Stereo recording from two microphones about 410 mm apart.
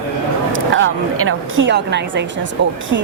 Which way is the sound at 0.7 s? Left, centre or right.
Right.